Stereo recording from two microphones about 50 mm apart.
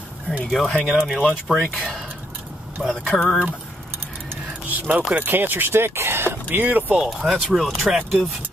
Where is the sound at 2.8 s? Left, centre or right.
Right.